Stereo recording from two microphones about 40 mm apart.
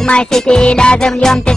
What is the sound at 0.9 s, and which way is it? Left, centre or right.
Music, centre.